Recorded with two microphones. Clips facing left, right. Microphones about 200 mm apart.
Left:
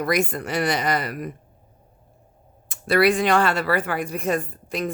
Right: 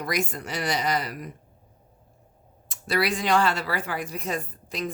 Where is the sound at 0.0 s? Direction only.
55° left (ahead or behind).